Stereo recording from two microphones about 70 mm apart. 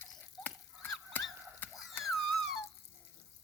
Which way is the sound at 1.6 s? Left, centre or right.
Left.